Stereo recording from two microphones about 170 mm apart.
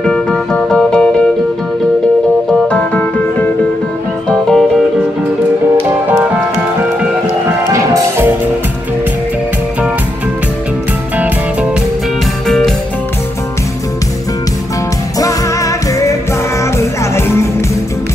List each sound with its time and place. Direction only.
0.0 s music: 5° left (ahead or behind)
2.7 s music: 10° left (ahead or behind)
7.7 s music: 15° right (ahead or behind)
12.4 s music: centre (ahead or behind)
15.1 s music: 20° left (ahead or behind)